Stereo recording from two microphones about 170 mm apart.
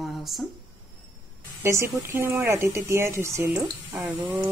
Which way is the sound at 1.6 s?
15° right (ahead or behind).